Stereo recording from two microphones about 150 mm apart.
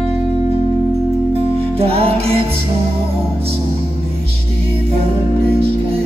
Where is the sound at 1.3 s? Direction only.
40° right (ahead or behind).